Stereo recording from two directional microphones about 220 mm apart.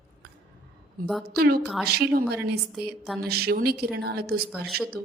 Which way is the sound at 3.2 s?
45° right (ahead or behind).